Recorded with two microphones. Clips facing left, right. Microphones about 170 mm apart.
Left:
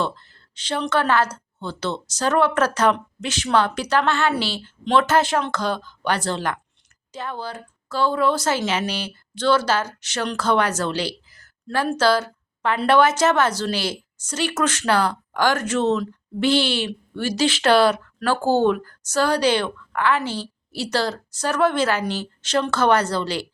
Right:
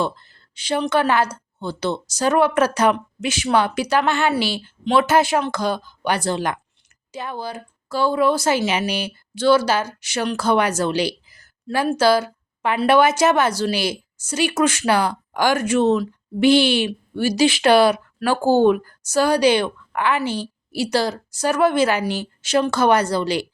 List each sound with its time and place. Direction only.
0.0 s a woman's voice: 10° right (ahead or behind)